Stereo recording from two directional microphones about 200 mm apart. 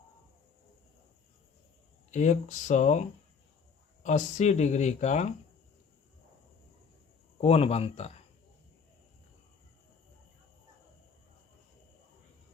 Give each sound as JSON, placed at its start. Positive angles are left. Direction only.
{"t": 2.0, "sound": "speech", "side_deg": 35}
{"t": 4.0, "sound": "speech", "side_deg": 35}
{"t": 7.4, "sound": "speech", "side_deg": 30}